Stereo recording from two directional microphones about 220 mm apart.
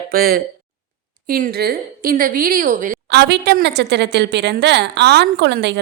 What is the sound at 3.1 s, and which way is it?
A woman's voice, 50° right (ahead or behind).